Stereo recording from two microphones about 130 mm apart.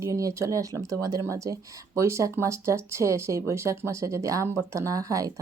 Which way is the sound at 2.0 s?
20° right (ahead or behind).